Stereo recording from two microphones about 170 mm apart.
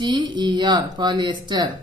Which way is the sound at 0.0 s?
25° right (ahead or behind).